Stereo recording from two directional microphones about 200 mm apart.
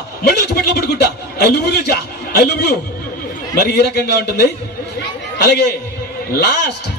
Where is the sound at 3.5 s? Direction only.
55° left (ahead or behind).